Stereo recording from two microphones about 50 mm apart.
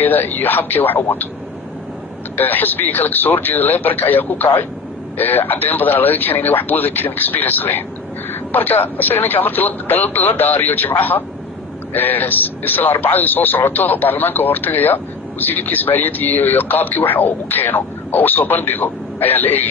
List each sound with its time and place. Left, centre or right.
0.0 s speech: left
2.3 s speech: left